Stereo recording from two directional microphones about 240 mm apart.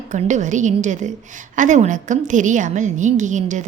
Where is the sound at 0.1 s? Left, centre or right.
Right.